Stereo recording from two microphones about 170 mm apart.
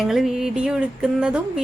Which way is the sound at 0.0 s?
Centre (ahead or behind).